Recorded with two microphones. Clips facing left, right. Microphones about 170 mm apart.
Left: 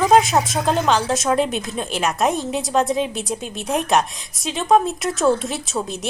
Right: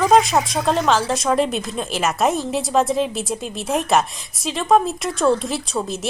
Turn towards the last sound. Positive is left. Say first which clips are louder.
# right 1 dB
turn(degrees=0)  # may be behind; listen again after turning